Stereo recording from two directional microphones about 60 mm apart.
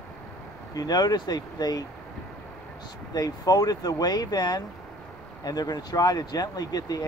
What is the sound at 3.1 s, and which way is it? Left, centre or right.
Speech, left.